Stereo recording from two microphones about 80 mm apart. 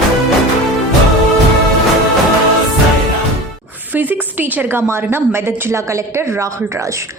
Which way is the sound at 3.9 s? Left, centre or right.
Right.